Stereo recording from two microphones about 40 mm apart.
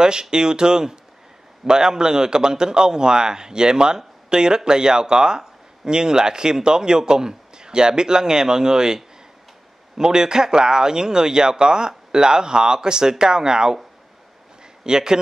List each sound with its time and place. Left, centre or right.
0.0 s a man's voice: centre
14.8 s speech: centre